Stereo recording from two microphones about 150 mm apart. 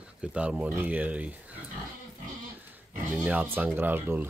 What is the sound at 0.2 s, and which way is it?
Speech, 5° right (ahead or behind).